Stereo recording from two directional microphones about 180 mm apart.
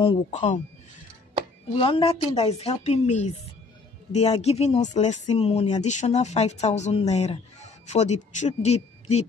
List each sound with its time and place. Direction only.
0.3 s speech: 40° left (ahead or behind)
1.8 s speech: 30° left (ahead or behind)